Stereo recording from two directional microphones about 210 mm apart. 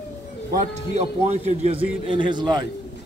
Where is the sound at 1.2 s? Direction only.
30° right (ahead or behind).